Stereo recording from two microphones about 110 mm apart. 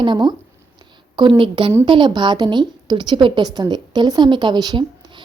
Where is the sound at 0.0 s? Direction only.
45° right (ahead or behind).